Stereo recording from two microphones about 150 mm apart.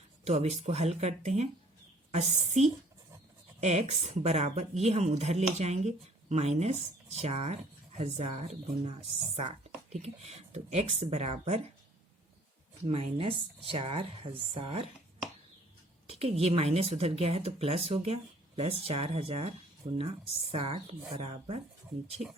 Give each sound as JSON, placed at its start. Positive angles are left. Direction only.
{"t": 0.3, "sound": "speech", "side_deg": -45}
{"t": 12.9, "sound": "speech", "side_deg": -40}
{"t": 16.0, "sound": "speech", "side_deg": -40}